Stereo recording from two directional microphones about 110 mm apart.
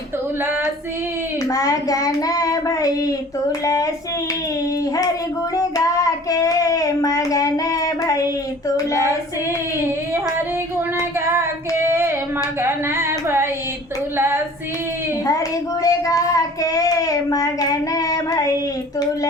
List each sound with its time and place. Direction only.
1.5 s child singing: 30° left (ahead or behind)
5.5 s child singing: 30° left (ahead or behind)
11.3 s child singing: 25° right (ahead or behind)
12.6 s a sound: 20° right (ahead or behind)
15.8 s child singing: 30° left (ahead or behind)